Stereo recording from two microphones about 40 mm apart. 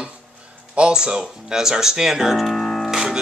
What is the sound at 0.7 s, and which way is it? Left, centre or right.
Speech, right.